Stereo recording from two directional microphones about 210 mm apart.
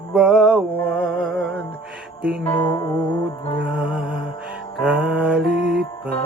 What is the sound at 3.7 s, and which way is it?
Music, 5° right (ahead or behind).